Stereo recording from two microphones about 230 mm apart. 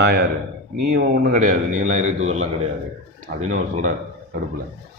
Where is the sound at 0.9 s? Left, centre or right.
Right.